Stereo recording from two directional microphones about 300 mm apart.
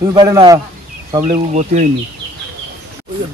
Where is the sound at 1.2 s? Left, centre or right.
Right.